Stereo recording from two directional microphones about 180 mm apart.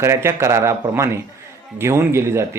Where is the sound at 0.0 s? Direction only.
15° right (ahead or behind).